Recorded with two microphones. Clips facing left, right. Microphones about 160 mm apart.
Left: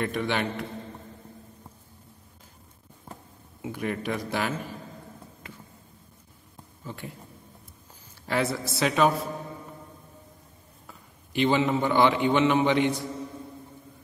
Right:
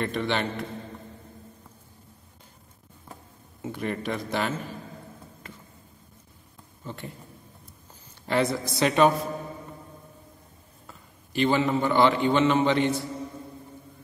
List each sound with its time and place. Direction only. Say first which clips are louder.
0.0 s a man's voice: even; 10° left (ahead or behind)
3.6 s a man's voice: even; 5° left (ahead or behind)
6.8 s speech: right 1 dB; 5° left (ahead or behind)
8.3 s a man's voice: right 2 dB; 5° left (ahead or behind)
11.3 s a man's voice: even; 15° left (ahead or behind)